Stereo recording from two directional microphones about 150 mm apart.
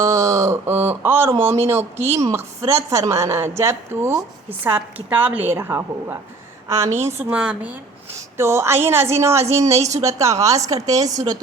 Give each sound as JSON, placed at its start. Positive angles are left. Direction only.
{"t": 0.0, "sound": "a sound", "side_deg": -20}
{"t": 1.8, "sound": "speech", "side_deg": -45}
{"t": 2.1, "sound": "a woman's voice", "side_deg": -20}